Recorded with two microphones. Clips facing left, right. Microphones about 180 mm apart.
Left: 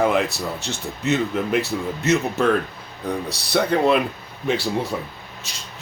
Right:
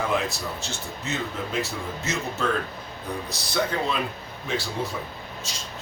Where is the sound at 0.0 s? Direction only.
65° left (ahead or behind).